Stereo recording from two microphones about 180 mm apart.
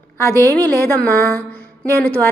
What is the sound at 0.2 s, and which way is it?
A woman's voice, 15° left (ahead or behind).